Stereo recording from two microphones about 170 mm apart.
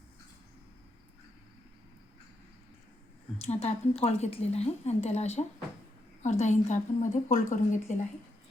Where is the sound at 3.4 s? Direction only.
40° left (ahead or behind).